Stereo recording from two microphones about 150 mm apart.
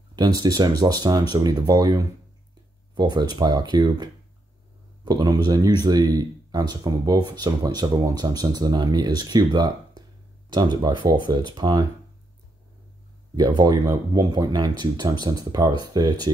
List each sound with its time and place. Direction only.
0.1 s speech: 25° right (ahead or behind)
13.4 s speech: 30° right (ahead or behind)